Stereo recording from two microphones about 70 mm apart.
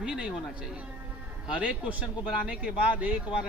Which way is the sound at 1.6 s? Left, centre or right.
Centre.